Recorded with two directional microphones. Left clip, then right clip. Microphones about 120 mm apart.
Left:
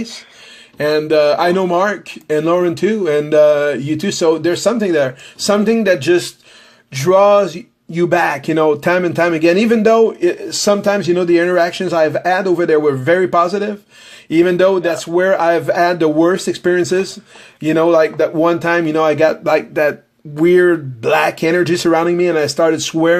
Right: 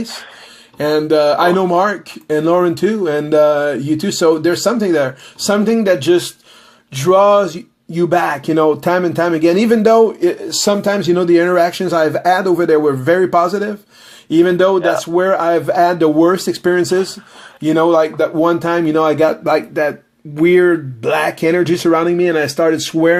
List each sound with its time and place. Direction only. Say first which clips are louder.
0.8 s speech: even; 5° left (ahead or behind); by 18.5 s 25° left (ahead or behind)
18.5 s speech: even; 10° left (ahead or behind)
20.3 s speech: even; 15° left (ahead or behind)